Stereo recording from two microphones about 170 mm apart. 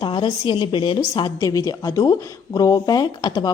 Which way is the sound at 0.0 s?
30° left (ahead or behind).